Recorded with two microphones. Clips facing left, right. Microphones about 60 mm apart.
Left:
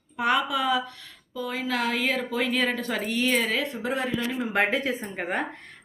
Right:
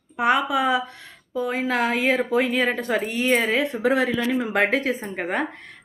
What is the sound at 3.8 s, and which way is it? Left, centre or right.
Speech, right.